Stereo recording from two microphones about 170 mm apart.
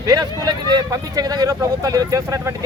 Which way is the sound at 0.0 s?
20° right (ahead or behind).